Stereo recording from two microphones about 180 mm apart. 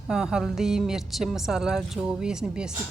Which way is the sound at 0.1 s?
5° right (ahead or behind).